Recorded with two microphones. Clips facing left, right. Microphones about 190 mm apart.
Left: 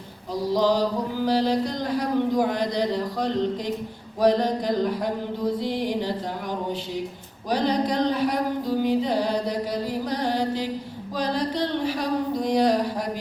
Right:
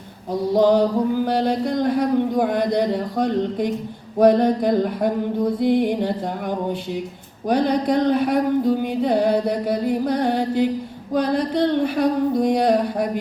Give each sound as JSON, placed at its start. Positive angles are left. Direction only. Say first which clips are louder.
{"t": 0.5, "sound": "chant", "louder": "right 6 dB", "side_deg": -55}
{"t": 7.5, "sound": "chant", "louder": "right 4 dB", "side_deg": -55}